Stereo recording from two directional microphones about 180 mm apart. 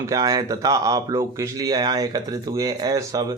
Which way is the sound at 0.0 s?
20° right (ahead or behind).